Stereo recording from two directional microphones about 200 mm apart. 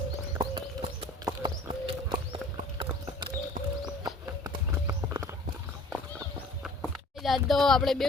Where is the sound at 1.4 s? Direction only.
25° right (ahead or behind).